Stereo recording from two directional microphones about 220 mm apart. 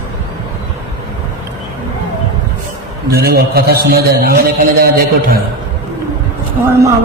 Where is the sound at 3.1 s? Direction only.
45° right (ahead or behind).